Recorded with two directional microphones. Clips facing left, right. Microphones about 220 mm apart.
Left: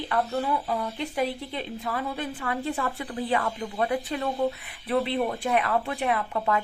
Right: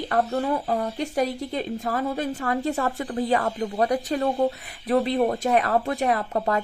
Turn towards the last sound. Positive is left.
turn(degrees=-40)  # may be behind; listen again after turning